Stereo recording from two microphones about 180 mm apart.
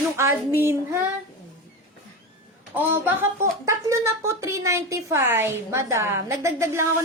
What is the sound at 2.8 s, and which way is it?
Speech, 10° right (ahead or behind).